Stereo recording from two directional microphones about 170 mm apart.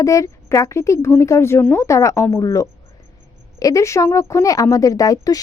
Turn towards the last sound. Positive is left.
turn(degrees=20)  # may be behind; listen again after turning